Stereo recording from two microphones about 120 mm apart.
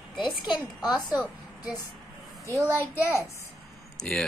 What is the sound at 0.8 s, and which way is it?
Speech, 5° right (ahead or behind).